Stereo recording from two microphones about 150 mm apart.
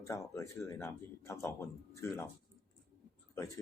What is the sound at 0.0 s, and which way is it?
Speech, 20° left (ahead or behind).